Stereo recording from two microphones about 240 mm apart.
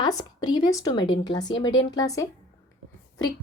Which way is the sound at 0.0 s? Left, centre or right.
Centre.